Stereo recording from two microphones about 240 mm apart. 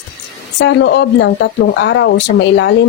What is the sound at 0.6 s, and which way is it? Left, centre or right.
Speech, left.